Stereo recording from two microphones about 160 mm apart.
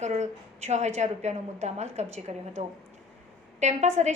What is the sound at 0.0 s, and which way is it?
A woman's voice, 45° right (ahead or behind).